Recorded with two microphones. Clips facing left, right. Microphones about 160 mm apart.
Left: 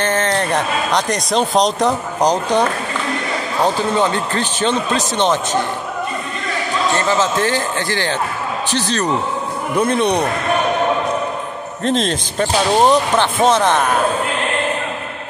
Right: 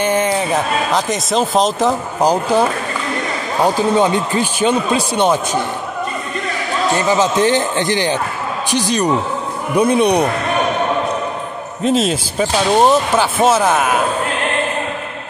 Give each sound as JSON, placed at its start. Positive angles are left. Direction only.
{"t": 0.0, "sound": "speech", "side_deg": -10}
{"t": 7.0, "sound": "speech", "side_deg": -15}
{"t": 11.8, "sound": "speech", "side_deg": -5}